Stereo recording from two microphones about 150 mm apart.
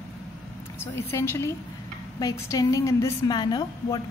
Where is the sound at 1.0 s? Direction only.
15° left (ahead or behind).